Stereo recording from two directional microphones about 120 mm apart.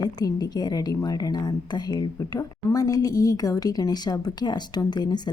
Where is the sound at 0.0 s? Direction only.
35° left (ahead or behind).